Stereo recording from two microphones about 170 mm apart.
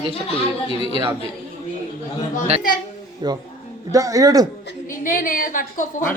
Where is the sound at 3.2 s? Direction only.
25° right (ahead or behind).